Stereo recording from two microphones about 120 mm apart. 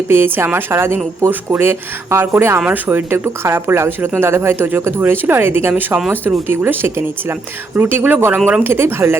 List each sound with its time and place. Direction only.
0.1 s a woman's voice: 20° right (ahead or behind)